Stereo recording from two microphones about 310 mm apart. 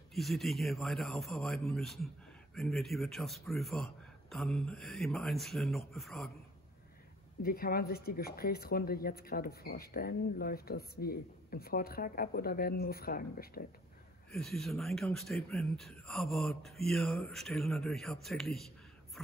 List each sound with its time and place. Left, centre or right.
0.1 s speech: centre
7.4 s speech: left
14.3 s speech: centre
19.2 s a sound: centre